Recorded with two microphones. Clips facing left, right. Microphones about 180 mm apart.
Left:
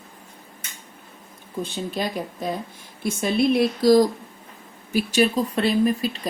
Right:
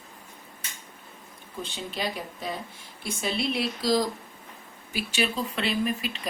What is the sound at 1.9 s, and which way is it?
Speech, 45° left (ahead or behind).